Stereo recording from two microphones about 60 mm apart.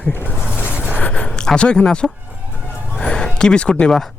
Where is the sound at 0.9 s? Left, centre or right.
Left.